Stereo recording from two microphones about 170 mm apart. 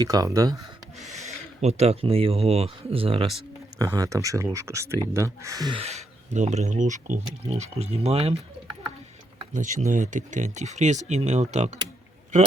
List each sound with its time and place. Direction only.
0.0 s speech: 20° right (ahead or behind)
1.1 s speech: 40° right (ahead or behind)
3.8 s speech: 20° right (ahead or behind)
5.8 s speech: 40° right (ahead or behind)
9.5 s speech: 50° right (ahead or behind)